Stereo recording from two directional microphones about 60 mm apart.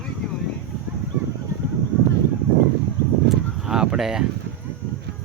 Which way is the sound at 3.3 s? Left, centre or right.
Centre.